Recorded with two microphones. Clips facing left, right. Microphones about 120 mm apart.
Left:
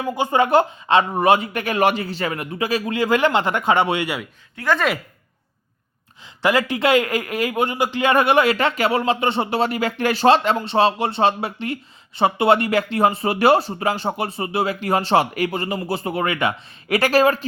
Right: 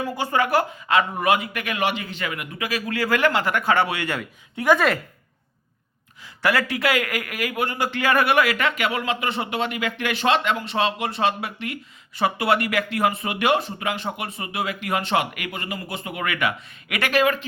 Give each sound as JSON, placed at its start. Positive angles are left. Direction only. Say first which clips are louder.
{"t": 0.0, "sound": "speech", "louder": "left 4 dB", "side_deg": 20}
{"t": 4.5, "sound": "speech", "louder": "right 3 dB", "side_deg": -15}
{"t": 6.4, "sound": "a man's voice", "louder": "left 3 dB", "side_deg": 20}